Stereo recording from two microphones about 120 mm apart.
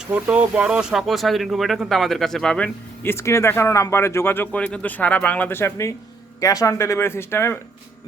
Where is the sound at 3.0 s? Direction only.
25° left (ahead or behind).